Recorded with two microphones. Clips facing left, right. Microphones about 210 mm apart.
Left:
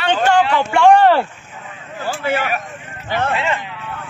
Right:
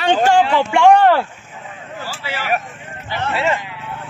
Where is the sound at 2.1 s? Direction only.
55° left (ahead or behind).